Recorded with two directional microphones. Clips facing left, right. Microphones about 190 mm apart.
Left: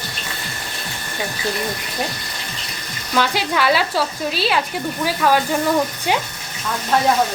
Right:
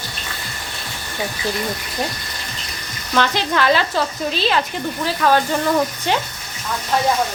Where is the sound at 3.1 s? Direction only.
5° left (ahead or behind).